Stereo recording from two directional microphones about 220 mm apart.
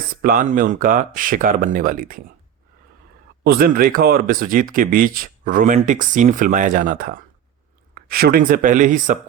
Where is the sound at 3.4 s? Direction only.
45° right (ahead or behind).